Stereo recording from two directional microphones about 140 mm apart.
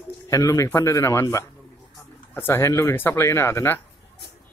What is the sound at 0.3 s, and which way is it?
Speech, 25° left (ahead or behind).